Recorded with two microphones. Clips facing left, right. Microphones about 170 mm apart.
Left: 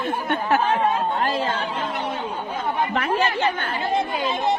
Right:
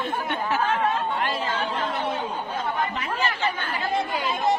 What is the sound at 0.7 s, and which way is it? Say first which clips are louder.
Speech: left 3 dB; 40° left (ahead or behind).